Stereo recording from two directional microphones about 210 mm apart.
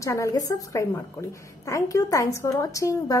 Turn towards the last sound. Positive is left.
turn(degrees=15)  # may be behind; listen again after turning